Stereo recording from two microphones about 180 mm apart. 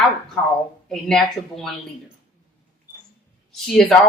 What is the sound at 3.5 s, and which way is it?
Speech, centre (ahead or behind).